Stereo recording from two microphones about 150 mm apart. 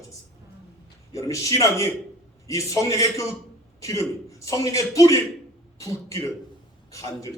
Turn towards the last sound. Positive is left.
turn(degrees=20)  # may be behind; listen again after turning